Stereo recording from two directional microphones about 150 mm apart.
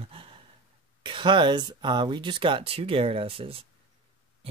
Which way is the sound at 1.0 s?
35° right (ahead or behind).